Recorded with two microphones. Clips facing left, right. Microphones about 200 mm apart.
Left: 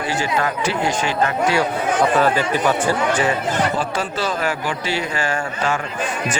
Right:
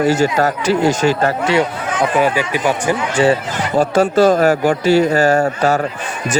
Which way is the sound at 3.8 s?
45° right (ahead or behind).